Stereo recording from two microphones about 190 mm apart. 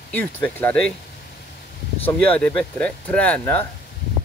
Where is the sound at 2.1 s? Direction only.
5° left (ahead or behind).